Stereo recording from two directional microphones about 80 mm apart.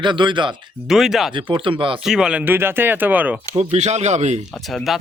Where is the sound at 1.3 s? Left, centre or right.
Right.